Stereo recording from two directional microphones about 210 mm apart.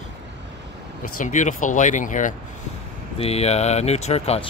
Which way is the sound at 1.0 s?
35° left (ahead or behind).